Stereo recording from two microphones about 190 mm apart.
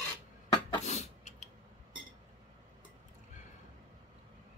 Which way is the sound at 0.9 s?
40° left (ahead or behind).